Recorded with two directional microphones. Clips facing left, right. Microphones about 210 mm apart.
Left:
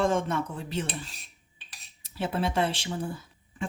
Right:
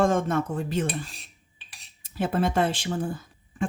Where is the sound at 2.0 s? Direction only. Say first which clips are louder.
Right 4 dB; 50° right (ahead or behind).